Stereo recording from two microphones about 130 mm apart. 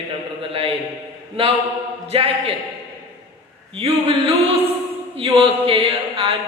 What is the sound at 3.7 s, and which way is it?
Speech, 45° right (ahead or behind).